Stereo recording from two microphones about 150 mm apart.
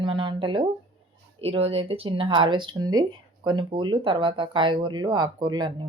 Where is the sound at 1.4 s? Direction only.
40° right (ahead or behind).